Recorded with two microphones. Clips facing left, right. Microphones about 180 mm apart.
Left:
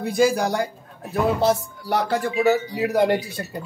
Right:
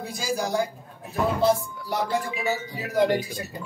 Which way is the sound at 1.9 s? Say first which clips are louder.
Left 4 dB; 70° left (ahead or behind).